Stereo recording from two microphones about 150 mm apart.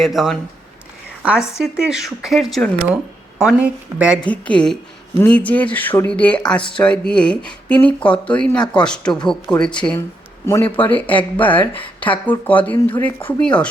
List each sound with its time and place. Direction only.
0.0 s a woman's voice: centre (ahead or behind)
4.3 s speech: 10° left (ahead or behind)
10.4 s speech: 20° left (ahead or behind)